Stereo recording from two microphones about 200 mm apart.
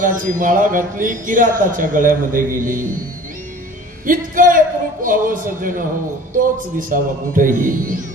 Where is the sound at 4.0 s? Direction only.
40° right (ahead or behind).